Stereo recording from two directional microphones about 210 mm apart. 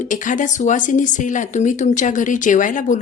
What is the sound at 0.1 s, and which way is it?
A woman's voice, 40° left (ahead or behind).